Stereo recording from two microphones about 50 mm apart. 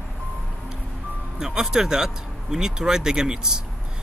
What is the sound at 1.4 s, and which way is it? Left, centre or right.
Speech, centre.